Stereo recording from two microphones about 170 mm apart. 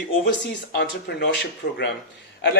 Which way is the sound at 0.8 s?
75° left (ahead or behind).